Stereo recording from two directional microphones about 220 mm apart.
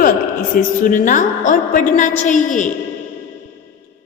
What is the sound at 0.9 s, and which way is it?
A man's voice, 35° left (ahead or behind).